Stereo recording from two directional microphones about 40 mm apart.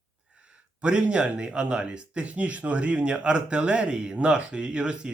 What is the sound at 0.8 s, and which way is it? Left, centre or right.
Speech, right.